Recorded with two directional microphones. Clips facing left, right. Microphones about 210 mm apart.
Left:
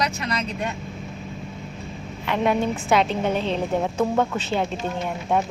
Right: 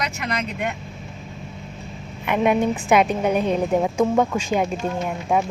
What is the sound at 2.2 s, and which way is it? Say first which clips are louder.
Speech: right 3 dB; 15° right (ahead or behind).